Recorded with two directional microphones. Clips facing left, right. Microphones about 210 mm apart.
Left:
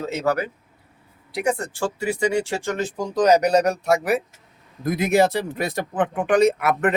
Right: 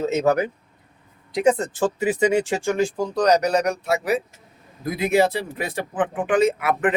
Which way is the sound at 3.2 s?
10° left (ahead or behind).